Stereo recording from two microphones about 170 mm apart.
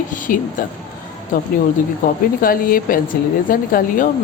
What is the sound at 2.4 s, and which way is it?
Speech, 55° left (ahead or behind).